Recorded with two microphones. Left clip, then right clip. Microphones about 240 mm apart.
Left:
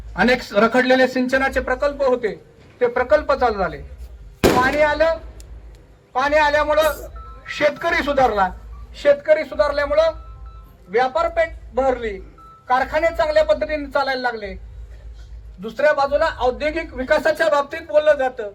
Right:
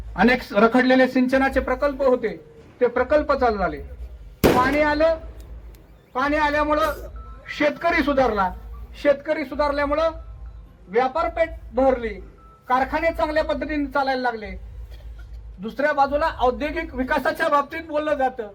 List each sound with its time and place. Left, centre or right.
0.1 s speech: left
6.1 s speech: left
15.6 s speech: left